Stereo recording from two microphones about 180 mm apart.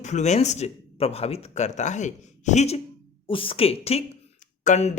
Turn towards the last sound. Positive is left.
turn(degrees=40)  # may be behind; listen again after turning